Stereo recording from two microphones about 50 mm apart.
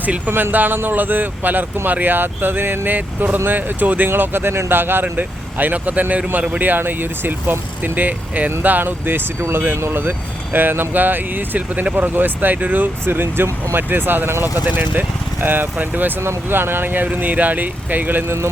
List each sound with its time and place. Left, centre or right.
0.3 s speech: right
0.5 s speech: right
4.1 s speech: right
9.4 s speech: right
9.8 s speech: right